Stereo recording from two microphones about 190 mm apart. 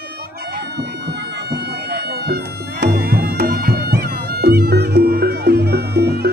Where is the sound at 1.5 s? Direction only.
55° right (ahead or behind).